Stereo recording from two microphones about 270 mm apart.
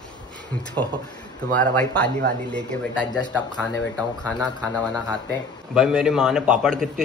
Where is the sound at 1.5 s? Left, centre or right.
Centre.